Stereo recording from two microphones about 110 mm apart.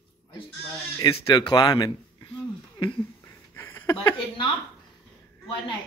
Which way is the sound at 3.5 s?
20° left (ahead or behind).